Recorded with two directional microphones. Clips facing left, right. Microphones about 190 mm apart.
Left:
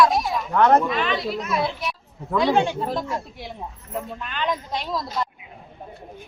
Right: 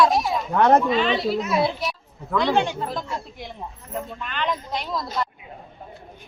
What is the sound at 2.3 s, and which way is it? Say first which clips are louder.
Speech: left 1 dB; 10° left (ahead or behind).